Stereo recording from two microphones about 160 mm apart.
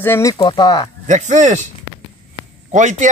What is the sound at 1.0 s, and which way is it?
Speech, 50° right (ahead or behind).